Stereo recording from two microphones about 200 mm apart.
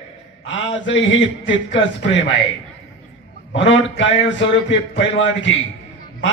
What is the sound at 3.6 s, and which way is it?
A man's voice, 65° left (ahead or behind).